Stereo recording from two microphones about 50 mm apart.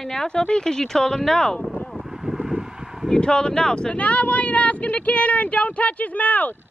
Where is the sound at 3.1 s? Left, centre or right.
Centre; by 6.5 s left.